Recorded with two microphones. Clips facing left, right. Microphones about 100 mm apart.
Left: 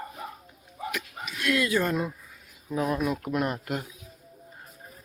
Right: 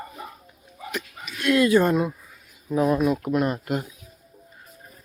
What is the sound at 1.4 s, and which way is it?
Speech, 35° right (ahead or behind).